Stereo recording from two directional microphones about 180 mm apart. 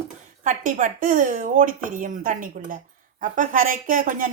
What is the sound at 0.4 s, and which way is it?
Speech, 45° right (ahead or behind).